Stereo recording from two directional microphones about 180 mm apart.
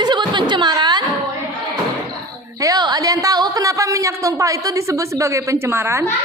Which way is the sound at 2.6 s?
20° right (ahead or behind).